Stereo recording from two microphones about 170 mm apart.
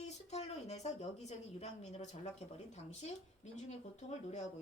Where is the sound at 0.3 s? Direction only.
40° left (ahead or behind).